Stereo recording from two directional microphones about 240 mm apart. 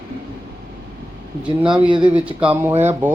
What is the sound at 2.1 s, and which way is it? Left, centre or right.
Speech, centre.